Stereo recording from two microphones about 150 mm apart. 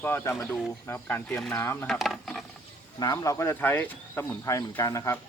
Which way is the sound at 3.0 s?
25° left (ahead or behind).